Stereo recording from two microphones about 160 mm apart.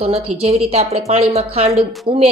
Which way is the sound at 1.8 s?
Centre (ahead or behind).